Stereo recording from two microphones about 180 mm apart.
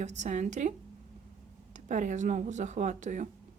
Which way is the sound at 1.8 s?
45° right (ahead or behind).